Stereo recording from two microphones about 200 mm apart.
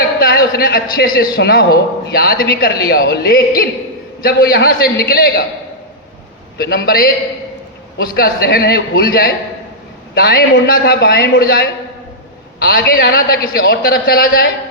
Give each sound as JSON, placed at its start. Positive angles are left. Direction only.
{"t": 0.2, "sound": "a man's voice", "side_deg": 50}
{"t": 6.6, "sound": "a man's voice", "side_deg": 50}